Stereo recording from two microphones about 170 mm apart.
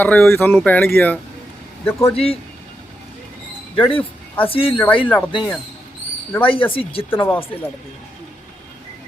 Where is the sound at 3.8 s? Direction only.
30° left (ahead or behind).